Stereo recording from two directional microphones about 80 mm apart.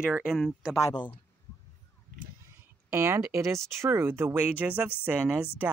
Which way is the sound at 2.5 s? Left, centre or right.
Right.